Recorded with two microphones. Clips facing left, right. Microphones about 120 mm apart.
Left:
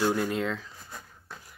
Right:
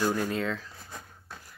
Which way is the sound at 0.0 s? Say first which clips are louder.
Left 1 dB; 10° left (ahead or behind).